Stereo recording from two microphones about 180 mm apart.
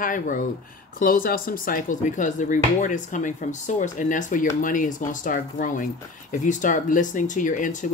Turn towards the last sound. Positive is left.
turn(degrees=45)  # may be behind; listen again after turning